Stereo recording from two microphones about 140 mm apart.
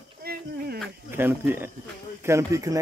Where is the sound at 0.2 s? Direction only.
90° right.